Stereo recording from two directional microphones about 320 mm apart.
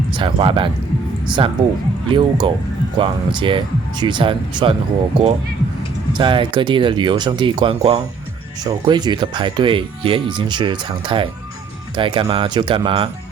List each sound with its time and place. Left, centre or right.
0.1 s speech: centre
6.1 s speech: centre